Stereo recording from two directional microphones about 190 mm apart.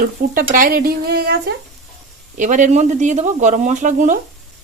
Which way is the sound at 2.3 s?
40° right (ahead or behind).